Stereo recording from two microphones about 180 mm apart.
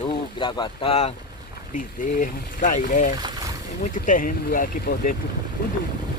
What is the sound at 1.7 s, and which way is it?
Speech, 45° left (ahead or behind).